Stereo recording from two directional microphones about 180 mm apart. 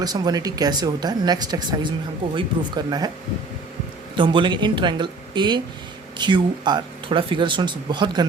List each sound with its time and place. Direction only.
0.0 s speech: 20° right (ahead or behind)
4.2 s speech: 25° right (ahead or behind)